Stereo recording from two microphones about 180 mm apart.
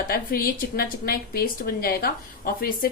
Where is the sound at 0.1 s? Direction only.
55° left (ahead or behind).